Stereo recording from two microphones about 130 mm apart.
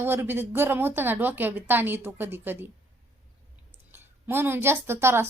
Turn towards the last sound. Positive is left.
turn(degrees=-20)  # may be behind; listen again after turning